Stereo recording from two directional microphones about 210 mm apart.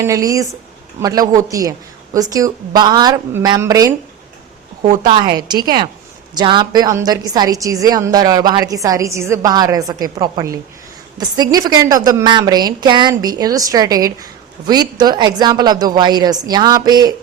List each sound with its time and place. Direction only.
0.0 s a woman's voice: 15° right (ahead or behind)
5.2 s a woman's voice: 20° right (ahead or behind)